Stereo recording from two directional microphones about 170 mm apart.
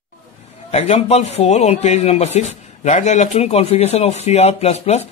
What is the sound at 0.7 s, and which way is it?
Speech, 40° left (ahead or behind).